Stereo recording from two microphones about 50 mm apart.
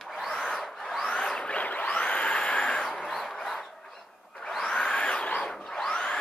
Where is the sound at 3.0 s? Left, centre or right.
Centre.